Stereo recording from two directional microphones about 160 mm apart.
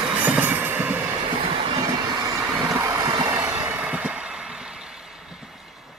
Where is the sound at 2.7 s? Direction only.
20° right (ahead or behind); by 5.5 s centre (ahead or behind).